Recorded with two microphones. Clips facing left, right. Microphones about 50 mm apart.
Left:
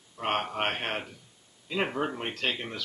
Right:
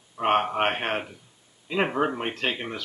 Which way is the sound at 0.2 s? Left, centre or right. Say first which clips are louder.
Right 7 dB; centre.